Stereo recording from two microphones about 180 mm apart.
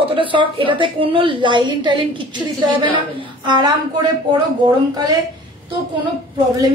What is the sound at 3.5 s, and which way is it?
Speech, 25° right (ahead or behind).